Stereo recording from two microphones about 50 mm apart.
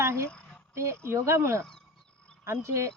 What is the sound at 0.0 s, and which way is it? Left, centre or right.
Speech, right.